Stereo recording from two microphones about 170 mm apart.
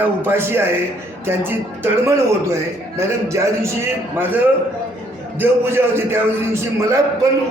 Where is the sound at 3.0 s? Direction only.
15° right (ahead or behind).